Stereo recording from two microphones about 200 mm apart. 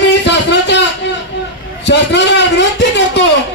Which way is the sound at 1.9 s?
60° left (ahead or behind).